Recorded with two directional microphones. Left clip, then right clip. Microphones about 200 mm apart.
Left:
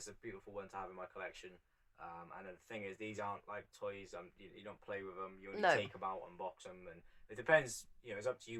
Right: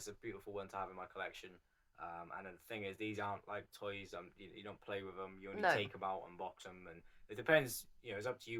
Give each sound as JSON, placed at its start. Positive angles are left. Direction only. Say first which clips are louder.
{"t": 0.0, "sound": "speech", "louder": "right 2 dB", "side_deg": -40}
{"t": 5.5, "sound": "speech", "louder": "left 2 dB", "side_deg": 10}
{"t": 6.0, "sound": "speech", "louder": "right 1 dB", "side_deg": -40}